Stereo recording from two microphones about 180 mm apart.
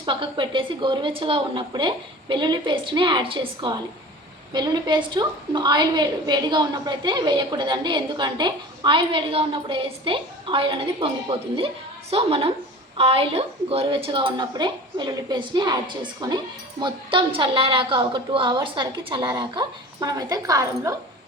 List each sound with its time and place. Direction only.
0.0 s a woman's voice: 25° right (ahead or behind)